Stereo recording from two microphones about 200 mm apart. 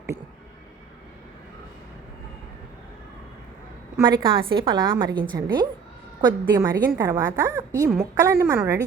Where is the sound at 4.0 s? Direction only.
25° right (ahead or behind).